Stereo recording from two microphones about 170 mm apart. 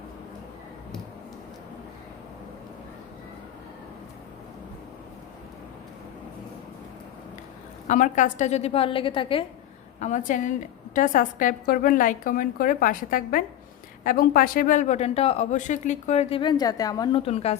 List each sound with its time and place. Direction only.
7.9 s a woman's voice: 50° left (ahead or behind); by 9.4 s 30° left (ahead or behind)
10.0 s a woman's voice: 45° left (ahead or behind)
16.4 s a woman's voice: 25° left (ahead or behind)